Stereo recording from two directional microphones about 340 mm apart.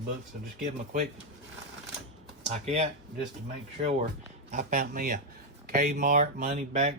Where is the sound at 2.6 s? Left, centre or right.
Centre.